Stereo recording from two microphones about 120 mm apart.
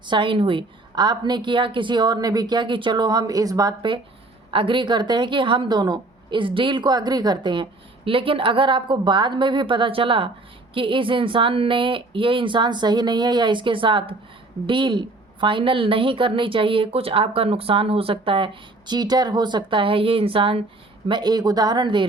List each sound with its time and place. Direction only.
0.0 s a woman's voice: 40° right (ahead or behind)
21.1 s a woman's voice: 35° right (ahead or behind)